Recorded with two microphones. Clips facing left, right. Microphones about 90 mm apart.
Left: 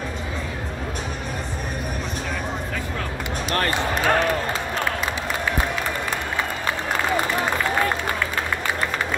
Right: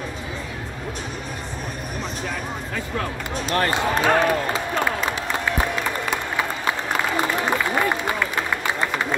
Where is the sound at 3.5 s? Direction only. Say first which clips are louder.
Right 2 dB; 25° right (ahead or behind).